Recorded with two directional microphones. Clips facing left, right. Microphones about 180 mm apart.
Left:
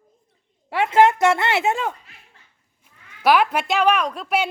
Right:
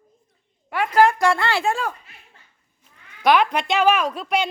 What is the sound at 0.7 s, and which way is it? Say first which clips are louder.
Speech: left 1 dB; 25° left (ahead or behind).